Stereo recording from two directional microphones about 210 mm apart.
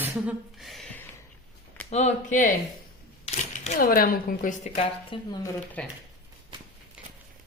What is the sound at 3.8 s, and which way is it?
Speech, 45° left (ahead or behind).